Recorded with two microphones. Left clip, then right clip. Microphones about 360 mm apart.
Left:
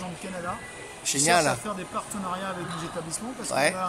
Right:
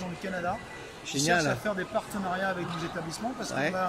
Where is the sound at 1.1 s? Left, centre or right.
Centre.